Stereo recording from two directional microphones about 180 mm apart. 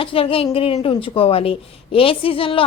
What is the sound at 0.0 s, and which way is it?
A woman's voice, 30° left (ahead or behind).